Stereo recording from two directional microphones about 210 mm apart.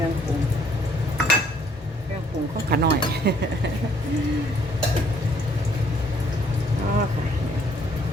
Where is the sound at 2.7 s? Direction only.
50° right (ahead or behind).